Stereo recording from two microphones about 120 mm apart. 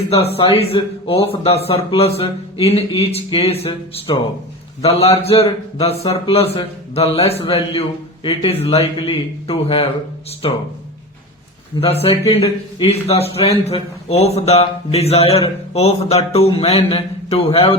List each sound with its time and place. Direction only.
0.1 s speech: 55° left (ahead or behind)
4.8 s speech: 55° left (ahead or behind)
11.8 s speech: 55° left (ahead or behind)